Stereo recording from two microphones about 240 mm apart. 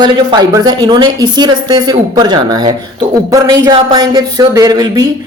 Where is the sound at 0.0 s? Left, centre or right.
Centre.